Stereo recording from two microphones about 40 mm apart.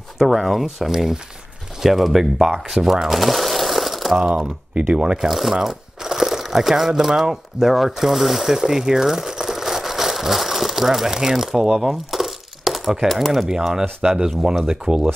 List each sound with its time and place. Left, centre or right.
0.2 s speech: centre
2.7 s a sound: centre
4.7 s speech: right
5.3 s crumpling: centre
6.9 s speech: centre
14.0 s speech: centre